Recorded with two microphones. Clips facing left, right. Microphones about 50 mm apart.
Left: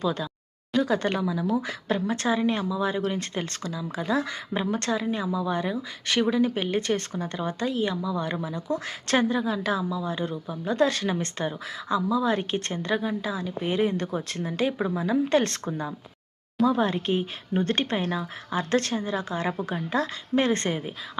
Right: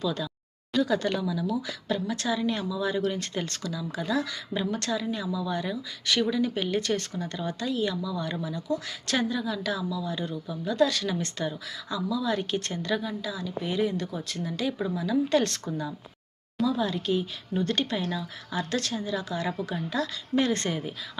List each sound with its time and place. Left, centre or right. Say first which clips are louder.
0.0 s speech: left 2 dB; left